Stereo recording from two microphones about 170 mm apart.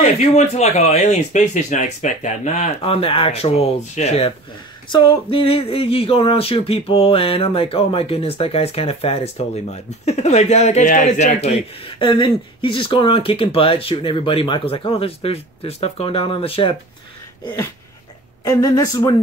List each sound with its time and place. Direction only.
0.0 s speech: 40° left (ahead or behind)
12.0 s speech: 30° left (ahead or behind)
18.4 s speech: 20° left (ahead or behind)